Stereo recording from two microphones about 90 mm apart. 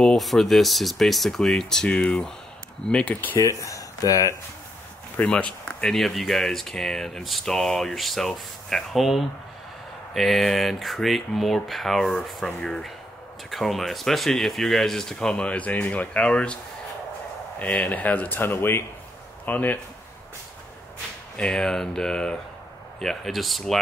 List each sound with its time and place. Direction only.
0.0 s speech: 5° left (ahead or behind); by 3.3 s 20° left (ahead or behind)
3.3 s speech: 35° left (ahead or behind)
5.1 s speech: 15° left (ahead or behind)
17.6 s speech: 15° left (ahead or behind)
21.4 s speech: 10° left (ahead or behind)